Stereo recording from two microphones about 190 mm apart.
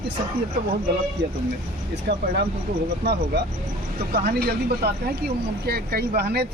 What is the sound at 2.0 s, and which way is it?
Speech, 60° right (ahead or behind).